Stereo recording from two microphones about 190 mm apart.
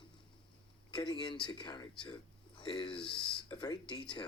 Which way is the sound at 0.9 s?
25° left (ahead or behind).